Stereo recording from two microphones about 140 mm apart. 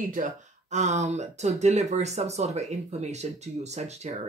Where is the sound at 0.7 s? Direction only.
55° right (ahead or behind).